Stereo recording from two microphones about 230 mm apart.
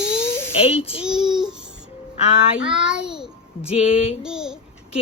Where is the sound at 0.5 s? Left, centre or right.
Left.